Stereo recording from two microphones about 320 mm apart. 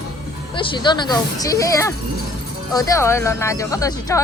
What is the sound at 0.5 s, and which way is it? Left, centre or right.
Speech, centre.